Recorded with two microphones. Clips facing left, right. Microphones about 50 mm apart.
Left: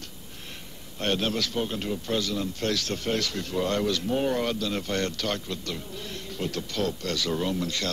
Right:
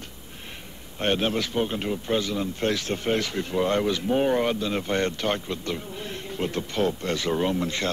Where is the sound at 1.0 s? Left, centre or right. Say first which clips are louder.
Right 3 dB; right.